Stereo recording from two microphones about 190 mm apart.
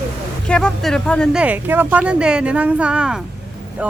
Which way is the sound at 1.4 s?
10° right (ahead or behind).